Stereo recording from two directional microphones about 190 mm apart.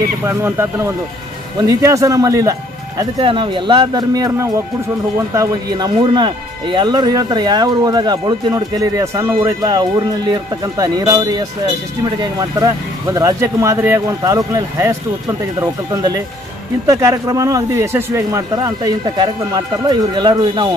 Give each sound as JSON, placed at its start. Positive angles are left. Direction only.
{"t": 0.2, "sound": "speech", "side_deg": -15}